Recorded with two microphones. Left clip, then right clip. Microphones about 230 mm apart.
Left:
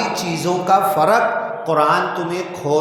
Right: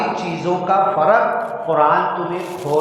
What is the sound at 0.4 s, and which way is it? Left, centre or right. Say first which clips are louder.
Speech: left 1 dB; left.